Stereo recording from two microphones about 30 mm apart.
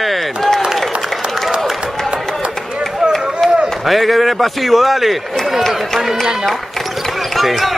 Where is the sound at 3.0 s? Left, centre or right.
Centre.